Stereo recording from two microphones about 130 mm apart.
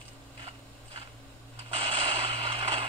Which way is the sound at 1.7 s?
40° right (ahead or behind).